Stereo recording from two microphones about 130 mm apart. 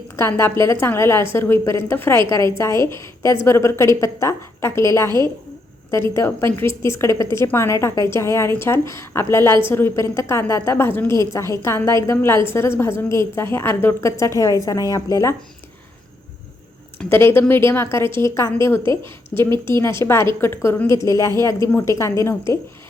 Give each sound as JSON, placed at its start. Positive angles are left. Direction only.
{"t": 0.2, "sound": "a woman's voice", "side_deg": 20}
{"t": 17.1, "sound": "a woman's voice", "side_deg": 20}